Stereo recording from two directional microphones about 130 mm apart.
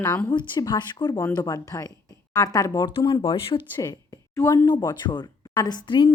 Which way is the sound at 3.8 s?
30° left (ahead or behind).